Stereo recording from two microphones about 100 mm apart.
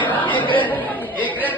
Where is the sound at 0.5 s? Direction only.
15° left (ahead or behind).